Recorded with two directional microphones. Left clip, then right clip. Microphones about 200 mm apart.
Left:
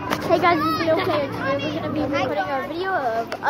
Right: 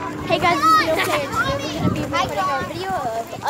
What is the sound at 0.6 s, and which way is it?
A child's voice, 30° right (ahead or behind).